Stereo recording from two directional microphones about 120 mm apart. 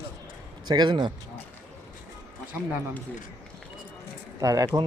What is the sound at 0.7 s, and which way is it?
Speech, 40° right (ahead or behind).